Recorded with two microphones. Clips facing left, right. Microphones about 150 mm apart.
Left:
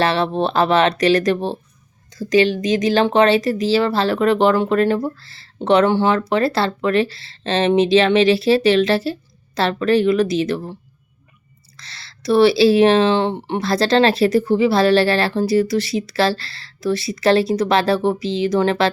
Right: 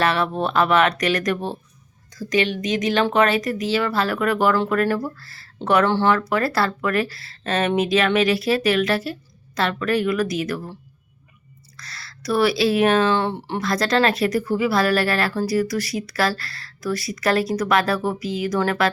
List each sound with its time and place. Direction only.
0.0 s speech: 30° left (ahead or behind)
11.8 s speech: 25° left (ahead or behind)